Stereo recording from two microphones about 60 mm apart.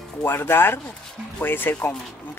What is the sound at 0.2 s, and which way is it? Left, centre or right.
Speech, left.